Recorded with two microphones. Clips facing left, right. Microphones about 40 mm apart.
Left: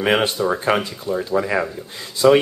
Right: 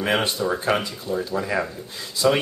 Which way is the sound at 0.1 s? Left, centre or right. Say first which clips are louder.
Left 3 dB; left.